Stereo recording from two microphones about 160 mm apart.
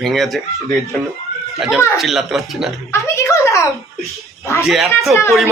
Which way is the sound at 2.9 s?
20° left (ahead or behind).